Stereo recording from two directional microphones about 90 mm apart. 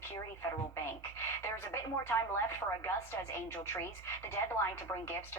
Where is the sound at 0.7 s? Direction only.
25° left (ahead or behind).